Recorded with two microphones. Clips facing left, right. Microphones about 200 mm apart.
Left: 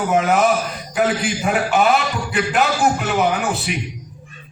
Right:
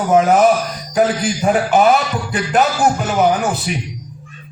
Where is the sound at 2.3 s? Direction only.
40° right (ahead or behind).